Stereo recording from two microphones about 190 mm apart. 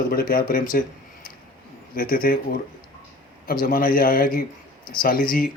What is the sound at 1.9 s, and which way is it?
Speech, 50° left (ahead or behind).